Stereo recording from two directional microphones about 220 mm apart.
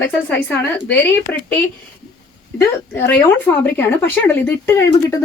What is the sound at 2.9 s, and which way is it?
Speech, 10° left (ahead or behind).